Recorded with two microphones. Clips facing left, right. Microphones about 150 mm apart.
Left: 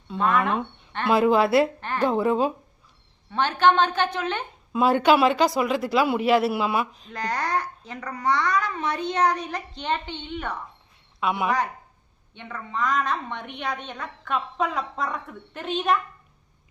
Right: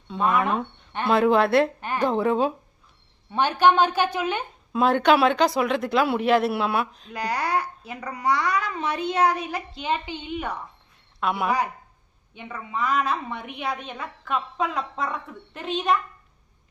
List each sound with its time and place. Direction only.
0.1 s a woman's voice: 5° right (ahead or behind)
1.8 s a sound: 15° right (ahead or behind)
2.0 s a woman's voice: centre (ahead or behind)
3.3 s a woman's voice: 15° right (ahead or behind)
4.7 s a woman's voice: 5° left (ahead or behind)
7.1 s a woman's voice: 10° right (ahead or behind)